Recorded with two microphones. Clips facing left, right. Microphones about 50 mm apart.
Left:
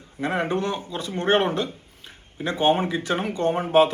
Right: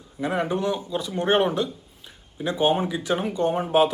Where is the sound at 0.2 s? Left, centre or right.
Left.